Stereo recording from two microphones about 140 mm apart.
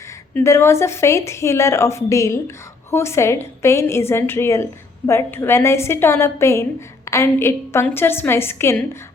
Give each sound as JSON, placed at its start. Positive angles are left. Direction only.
{"t": 0.3, "sound": "a woman's voice", "side_deg": 20}